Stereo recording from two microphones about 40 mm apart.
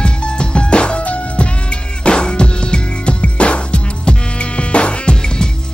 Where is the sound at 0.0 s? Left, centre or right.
Left.